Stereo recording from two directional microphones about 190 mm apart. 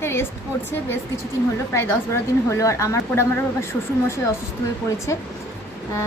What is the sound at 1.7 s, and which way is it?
Speech, 15° left (ahead or behind).